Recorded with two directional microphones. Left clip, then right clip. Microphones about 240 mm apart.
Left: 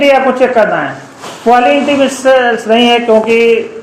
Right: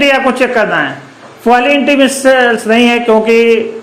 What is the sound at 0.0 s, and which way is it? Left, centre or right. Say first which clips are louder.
A man's voice: left 2 dB; right.